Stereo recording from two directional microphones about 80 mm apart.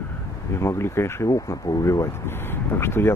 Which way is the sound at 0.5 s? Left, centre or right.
Left.